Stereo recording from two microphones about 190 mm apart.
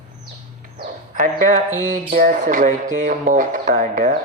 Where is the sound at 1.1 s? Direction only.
40° right (ahead or behind).